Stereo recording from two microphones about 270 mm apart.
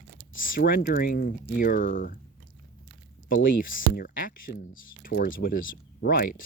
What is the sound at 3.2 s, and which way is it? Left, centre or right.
Speech, left.